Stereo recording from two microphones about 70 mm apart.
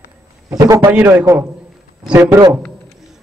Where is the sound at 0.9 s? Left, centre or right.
Right.